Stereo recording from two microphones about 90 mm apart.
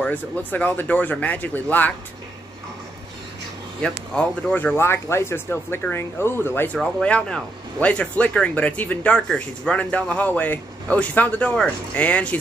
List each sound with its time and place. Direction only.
0.0 s a man's voice: 20° left (ahead or behind)
3.8 s a man's voice: 10° left (ahead or behind)
4.7 s speech: 30° left (ahead or behind)
6.8 s a man's voice: 10° left (ahead or behind)